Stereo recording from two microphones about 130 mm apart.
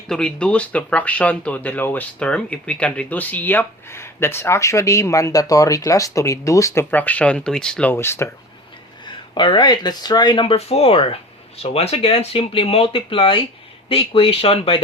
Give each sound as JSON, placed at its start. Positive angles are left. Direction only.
{"t": 0.1, "sound": "speech", "side_deg": 5}
{"t": 9.0, "sound": "speech", "side_deg": 40}